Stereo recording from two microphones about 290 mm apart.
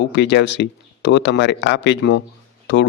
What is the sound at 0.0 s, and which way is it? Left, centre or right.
A man's voice, left.